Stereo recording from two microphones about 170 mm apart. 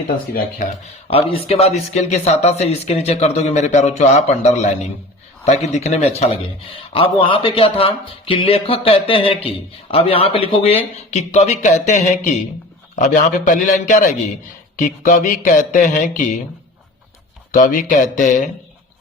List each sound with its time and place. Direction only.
1.1 s speech: 35° left (ahead or behind)
17.5 s speech: 50° left (ahead or behind)